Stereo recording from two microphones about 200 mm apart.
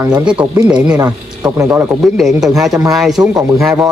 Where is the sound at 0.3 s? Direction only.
5° right (ahead or behind).